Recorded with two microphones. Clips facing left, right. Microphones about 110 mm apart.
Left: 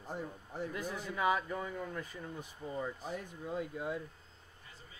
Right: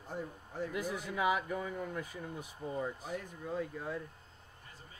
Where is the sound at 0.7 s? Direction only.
10° right (ahead or behind).